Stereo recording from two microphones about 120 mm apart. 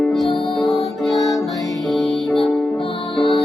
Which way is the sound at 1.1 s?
30° left (ahead or behind).